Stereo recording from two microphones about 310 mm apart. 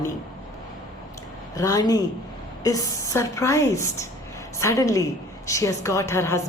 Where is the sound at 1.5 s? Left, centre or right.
Centre.